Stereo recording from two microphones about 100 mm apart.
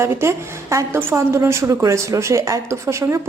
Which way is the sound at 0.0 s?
25° right (ahead or behind).